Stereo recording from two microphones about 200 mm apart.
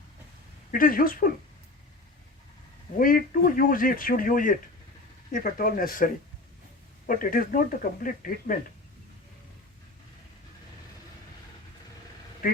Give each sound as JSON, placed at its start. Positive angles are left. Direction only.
{"t": 0.7, "sound": "speech", "side_deg": 45}
{"t": 3.0, "sound": "speech", "side_deg": 45}
{"t": 7.1, "sound": "speech", "side_deg": 45}